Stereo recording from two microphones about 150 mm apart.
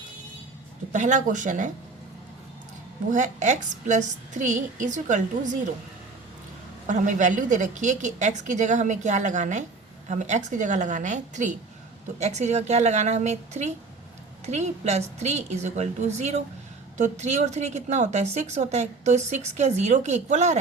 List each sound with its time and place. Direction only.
0.9 s a woman's voice: 55° right (ahead or behind)
3.1 s a woman's voice: 55° right (ahead or behind)
6.8 s a woman's voice: 55° right (ahead or behind)